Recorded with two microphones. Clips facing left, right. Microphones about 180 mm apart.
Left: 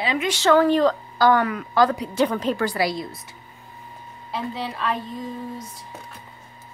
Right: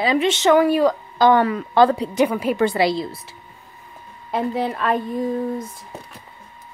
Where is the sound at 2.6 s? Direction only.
25° right (ahead or behind).